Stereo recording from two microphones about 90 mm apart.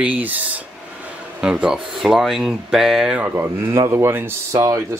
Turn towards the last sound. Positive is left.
turn(degrees=-30)  # may be behind; listen again after turning